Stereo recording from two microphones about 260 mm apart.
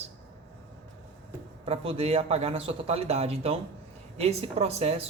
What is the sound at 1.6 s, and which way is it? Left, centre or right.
A man's voice, right.